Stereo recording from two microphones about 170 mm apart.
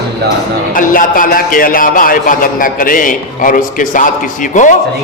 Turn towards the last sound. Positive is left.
turn(degrees=50)  # may be behind; listen again after turning